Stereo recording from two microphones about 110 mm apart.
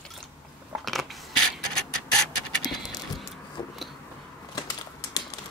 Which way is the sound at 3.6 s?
35° left (ahead or behind).